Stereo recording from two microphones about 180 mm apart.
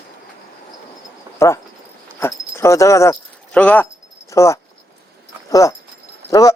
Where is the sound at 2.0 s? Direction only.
15° left (ahead or behind).